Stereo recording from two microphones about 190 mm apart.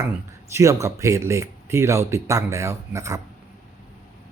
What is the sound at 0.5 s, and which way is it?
Speech, 15° right (ahead or behind).